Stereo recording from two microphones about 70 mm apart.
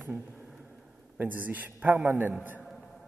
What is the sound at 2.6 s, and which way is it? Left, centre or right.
Music, centre.